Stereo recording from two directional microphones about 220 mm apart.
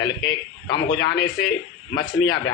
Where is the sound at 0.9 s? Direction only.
45° left (ahead or behind).